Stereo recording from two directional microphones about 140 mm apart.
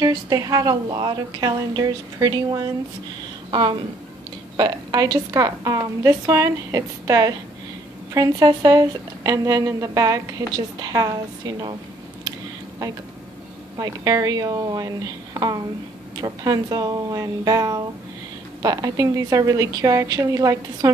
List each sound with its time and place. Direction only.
0.0 s a woman's voice: 25° right (ahead or behind)
4.6 s a woman's voice: 30° right (ahead or behind)
12.3 s a sound: 30° right (ahead or behind)
13.7 s a woman's voice: 25° right (ahead or behind)